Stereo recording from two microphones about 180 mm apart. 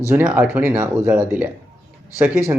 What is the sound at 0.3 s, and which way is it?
Speech, 5° right (ahead or behind).